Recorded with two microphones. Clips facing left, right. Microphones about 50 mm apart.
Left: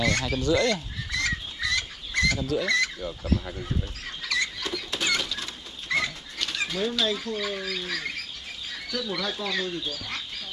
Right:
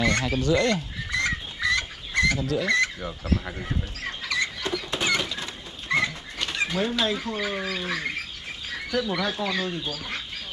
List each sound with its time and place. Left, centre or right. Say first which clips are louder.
0.0 s a sound: right 2 dB; right
0.4 s squawk: even; right
2.6 s speech: right 2 dB; right
4.2 s rodents: even; centre
4.9 s a sound: right 1 dB; centre
8.6 s speech: right 5 dB; right